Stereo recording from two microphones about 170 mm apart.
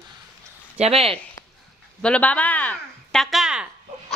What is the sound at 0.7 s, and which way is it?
Speech, 35° right (ahead or behind).